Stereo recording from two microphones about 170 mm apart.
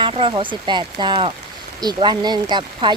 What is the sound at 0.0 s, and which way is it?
Speech, 30° right (ahead or behind).